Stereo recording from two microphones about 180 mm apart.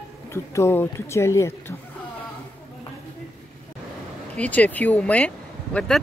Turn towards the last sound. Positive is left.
turn(degrees=5)  # may be behind; listen again after turning